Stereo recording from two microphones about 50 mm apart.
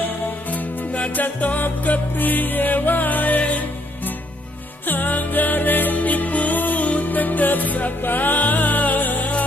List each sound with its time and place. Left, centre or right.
0.5 s music: left
4.8 s music: left